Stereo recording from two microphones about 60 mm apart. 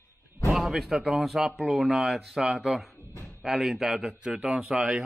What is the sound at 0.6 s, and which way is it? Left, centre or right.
A man's voice, centre.